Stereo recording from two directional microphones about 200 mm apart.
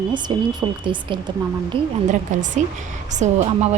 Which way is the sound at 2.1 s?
40° right (ahead or behind).